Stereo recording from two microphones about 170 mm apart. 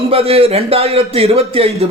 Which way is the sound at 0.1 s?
35° right (ahead or behind).